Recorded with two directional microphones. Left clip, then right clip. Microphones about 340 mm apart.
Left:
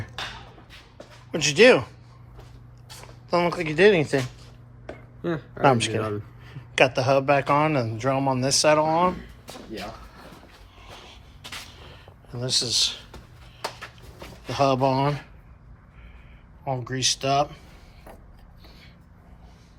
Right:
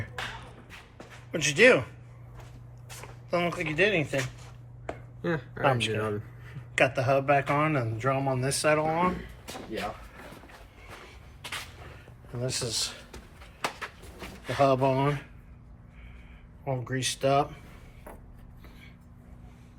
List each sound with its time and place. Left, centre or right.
0.9 s a sound: centre
3.2 s speech: centre
5.2 s speech: centre
6.7 s speech: centre
10.8 s a sound: centre
12.4 s speech: centre
14.2 s speech: centre
16.6 s speech: centre